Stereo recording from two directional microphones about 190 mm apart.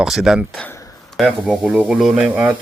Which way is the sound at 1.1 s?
Centre (ahead or behind).